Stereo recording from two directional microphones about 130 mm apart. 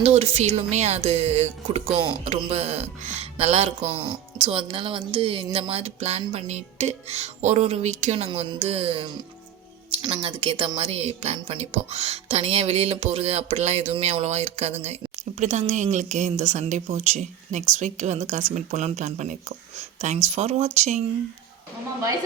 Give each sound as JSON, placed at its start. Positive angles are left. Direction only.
{"t": 0.0, "sound": "speech", "side_deg": -55}
{"t": 10.0, "sound": "speech", "side_deg": -35}